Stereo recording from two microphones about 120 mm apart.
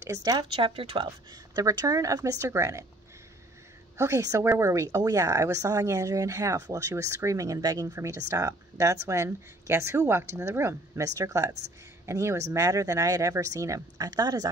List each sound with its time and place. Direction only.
0.0 s speech: 30° right (ahead or behind)
0.5 s speech: 50° right (ahead or behind)
1.0 s speech: 30° right (ahead or behind)
4.0 s speech: 25° right (ahead or behind)